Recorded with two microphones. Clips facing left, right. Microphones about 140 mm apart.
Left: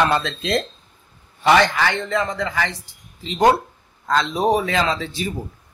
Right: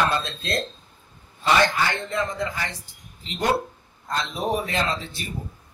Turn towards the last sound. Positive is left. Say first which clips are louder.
# left 5 dB
turn(degrees=90)